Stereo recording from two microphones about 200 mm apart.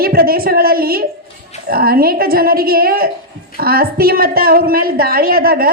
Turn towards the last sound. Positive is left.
turn(degrees=-50)  # may be behind; listen again after turning